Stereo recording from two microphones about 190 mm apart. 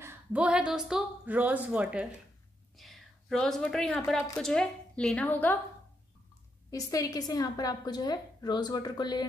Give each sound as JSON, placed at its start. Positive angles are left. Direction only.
{"t": 0.0, "sound": "speech", "side_deg": -5}
{"t": 2.7, "sound": "a sound", "side_deg": 0}
{"t": 4.4, "sound": "a woman's voice", "side_deg": 5}
{"t": 6.9, "sound": "a woman's voice", "side_deg": 20}